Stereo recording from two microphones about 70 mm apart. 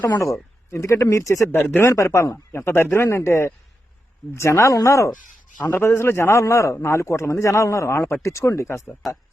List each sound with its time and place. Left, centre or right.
0.7 s a man's voice: left
1.5 s speech: left
1.8 s a man's voice: left
5.6 s a man's voice: left